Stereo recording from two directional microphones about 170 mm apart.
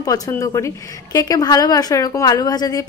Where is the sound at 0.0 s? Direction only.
20° left (ahead or behind).